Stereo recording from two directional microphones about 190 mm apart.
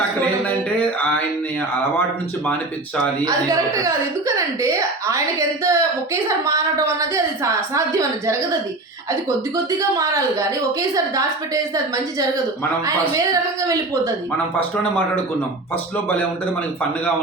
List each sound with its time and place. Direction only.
3.2 s speech: 20° right (ahead or behind)
9.9 s speech: 15° right (ahead or behind)
13.1 s speech: 15° right (ahead or behind)